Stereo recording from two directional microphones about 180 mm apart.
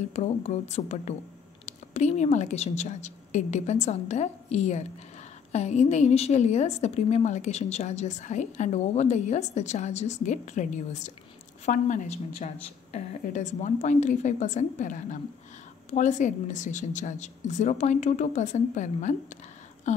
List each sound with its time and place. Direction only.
0.1 s a woman's voice: 40° left (ahead or behind)